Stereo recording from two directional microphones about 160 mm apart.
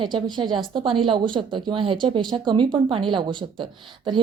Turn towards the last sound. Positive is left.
turn(degrees=-30)  # may be behind; listen again after turning